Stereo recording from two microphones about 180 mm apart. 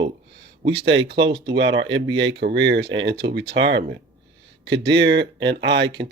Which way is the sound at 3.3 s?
75° right (ahead or behind).